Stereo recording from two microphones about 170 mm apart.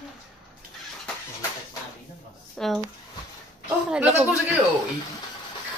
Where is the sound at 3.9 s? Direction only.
10° right (ahead or behind).